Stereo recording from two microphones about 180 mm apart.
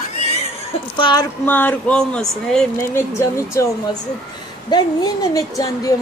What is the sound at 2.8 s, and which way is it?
A woman's voice, 15° left (ahead or behind).